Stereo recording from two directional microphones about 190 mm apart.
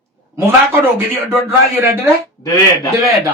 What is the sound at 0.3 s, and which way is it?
Speech, 15° right (ahead or behind).